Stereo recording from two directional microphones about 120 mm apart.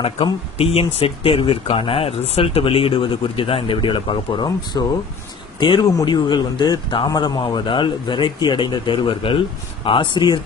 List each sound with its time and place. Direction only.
0.0 s speech: 55° left (ahead or behind)
4.7 s speech: 30° left (ahead or behind)